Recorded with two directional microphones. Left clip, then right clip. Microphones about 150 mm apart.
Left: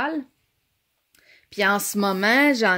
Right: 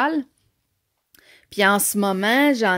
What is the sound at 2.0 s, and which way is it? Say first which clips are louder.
Speech: left 1 dB; 25° right (ahead or behind).